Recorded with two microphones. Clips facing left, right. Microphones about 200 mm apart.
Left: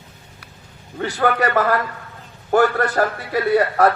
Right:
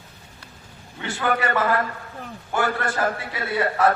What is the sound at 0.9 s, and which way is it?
A man's voice, 40° left (ahead or behind).